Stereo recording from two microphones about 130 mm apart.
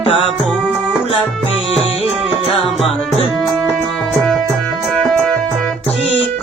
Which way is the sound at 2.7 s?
Centre (ahead or behind).